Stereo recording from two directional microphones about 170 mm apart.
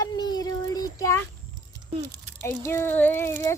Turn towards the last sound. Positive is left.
turn(degrees=15)  # may be behind; listen again after turning